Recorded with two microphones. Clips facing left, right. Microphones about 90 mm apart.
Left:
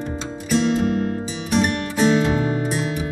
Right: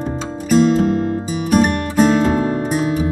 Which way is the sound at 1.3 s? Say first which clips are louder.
Right 6 dB; 45° right (ahead or behind).